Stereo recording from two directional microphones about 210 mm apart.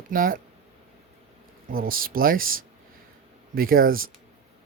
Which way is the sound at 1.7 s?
45° right (ahead or behind).